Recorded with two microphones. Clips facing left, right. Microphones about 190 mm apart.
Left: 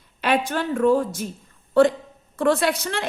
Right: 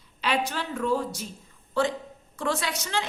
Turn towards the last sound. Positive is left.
turn(degrees=55)  # may be behind; listen again after turning